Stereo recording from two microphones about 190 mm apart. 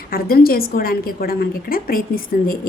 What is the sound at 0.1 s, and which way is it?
A woman's voice, 50° left (ahead or behind).